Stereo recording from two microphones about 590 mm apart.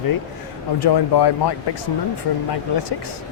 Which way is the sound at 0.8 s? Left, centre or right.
Left.